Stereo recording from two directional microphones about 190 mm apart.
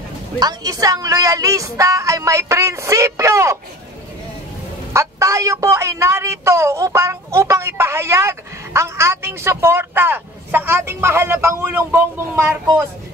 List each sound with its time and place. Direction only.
0.4 s speech: 20° right (ahead or behind)
4.9 s speech: 15° right (ahead or behind)